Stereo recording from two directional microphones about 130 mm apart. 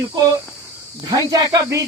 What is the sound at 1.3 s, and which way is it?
Speech, 25° right (ahead or behind).